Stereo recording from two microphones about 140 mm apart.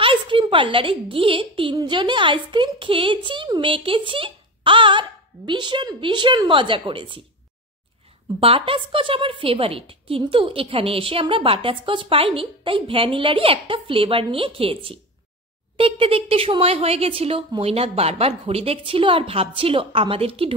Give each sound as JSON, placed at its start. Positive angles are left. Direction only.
{"t": 0.0, "sound": "a woman's voice", "side_deg": -35}
{"t": 8.4, "sound": "a woman's voice", "side_deg": -40}